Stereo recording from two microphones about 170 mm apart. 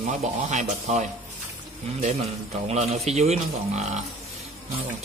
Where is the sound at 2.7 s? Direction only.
40° right (ahead or behind).